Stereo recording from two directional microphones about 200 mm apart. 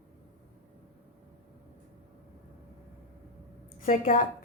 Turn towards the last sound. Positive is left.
turn(degrees=40)  # may be behind; listen again after turning